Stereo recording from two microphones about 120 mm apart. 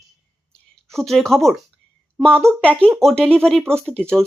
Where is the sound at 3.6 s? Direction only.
20° right (ahead or behind).